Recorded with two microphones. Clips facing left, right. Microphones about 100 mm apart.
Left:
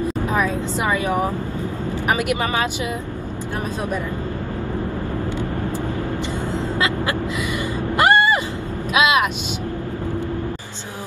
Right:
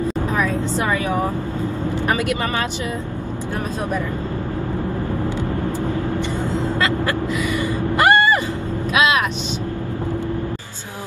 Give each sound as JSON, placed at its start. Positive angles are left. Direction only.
{"t": 0.7, "sound": "speech", "side_deg": 15}
{"t": 8.0, "sound": "music", "side_deg": 20}